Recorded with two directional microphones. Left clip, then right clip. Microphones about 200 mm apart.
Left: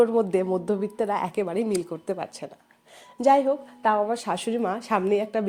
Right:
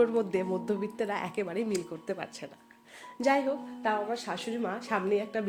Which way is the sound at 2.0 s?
20° left (ahead or behind).